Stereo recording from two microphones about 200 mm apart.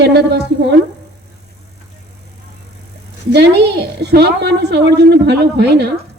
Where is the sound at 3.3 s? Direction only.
55° right (ahead or behind).